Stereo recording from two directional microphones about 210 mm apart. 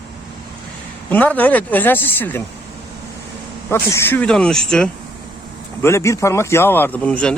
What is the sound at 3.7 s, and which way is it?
Speech, 10° left (ahead or behind).